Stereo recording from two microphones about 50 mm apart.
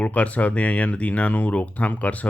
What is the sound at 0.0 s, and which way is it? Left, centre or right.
Speech, left.